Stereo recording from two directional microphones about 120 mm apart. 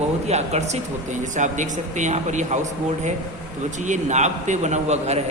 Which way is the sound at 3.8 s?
90° right.